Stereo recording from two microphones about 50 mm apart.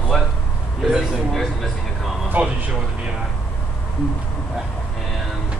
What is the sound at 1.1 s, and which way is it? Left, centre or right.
Speech, centre.